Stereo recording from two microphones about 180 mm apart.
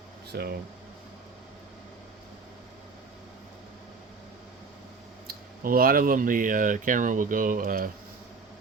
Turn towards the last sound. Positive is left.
turn(degrees=-50)  # may be behind; listen again after turning